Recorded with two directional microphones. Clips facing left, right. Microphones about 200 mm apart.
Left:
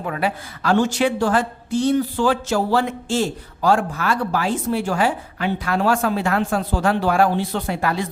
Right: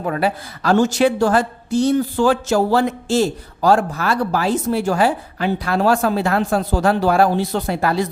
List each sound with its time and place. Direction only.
0.0 s a woman's voice: 40° right (ahead or behind)